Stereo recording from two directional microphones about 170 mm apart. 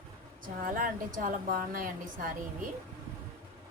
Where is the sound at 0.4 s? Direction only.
55° right (ahead or behind).